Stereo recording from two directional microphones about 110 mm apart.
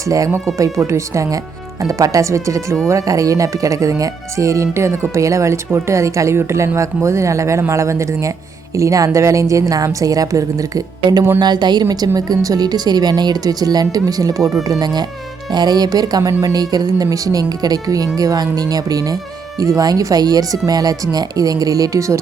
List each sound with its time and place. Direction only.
0.9 s a woman's voice: 30° right (ahead or behind)